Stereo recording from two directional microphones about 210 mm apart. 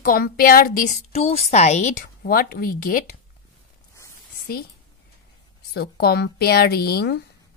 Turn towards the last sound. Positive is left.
turn(degrees=50)  # may be behind; listen again after turning